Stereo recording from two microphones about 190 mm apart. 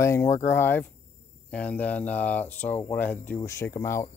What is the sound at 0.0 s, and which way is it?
Speech, 15° left (ahead or behind).